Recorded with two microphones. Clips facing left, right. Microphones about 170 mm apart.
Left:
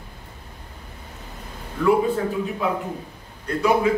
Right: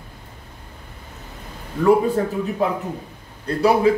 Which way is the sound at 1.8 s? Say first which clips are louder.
Right 3 dB; 40° right (ahead or behind).